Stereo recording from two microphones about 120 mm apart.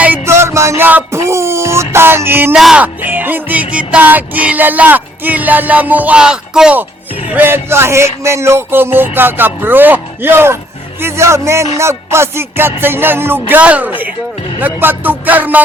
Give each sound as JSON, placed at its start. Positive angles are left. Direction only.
{"t": 0.0, "sound": "a sound", "side_deg": -20}
{"t": 2.6, "sound": "speech", "side_deg": 0}
{"t": 2.8, "sound": "music", "side_deg": -15}
{"t": 7.3, "sound": "speech", "side_deg": -15}
{"t": 11.8, "sound": "music", "side_deg": -20}